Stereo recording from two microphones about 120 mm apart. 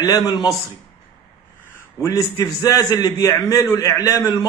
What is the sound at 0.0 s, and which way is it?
Speech, 35° left (ahead or behind).